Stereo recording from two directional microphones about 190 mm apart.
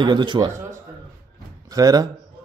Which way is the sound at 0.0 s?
25° right (ahead or behind).